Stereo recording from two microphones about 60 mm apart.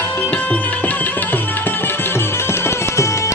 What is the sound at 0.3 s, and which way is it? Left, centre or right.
Music, left.